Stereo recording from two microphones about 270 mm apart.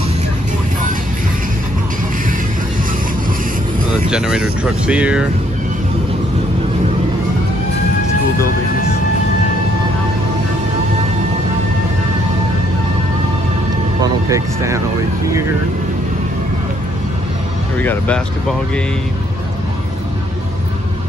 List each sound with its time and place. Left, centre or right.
4.1 s speech: centre
14.0 s speech: centre
17.7 s speech: centre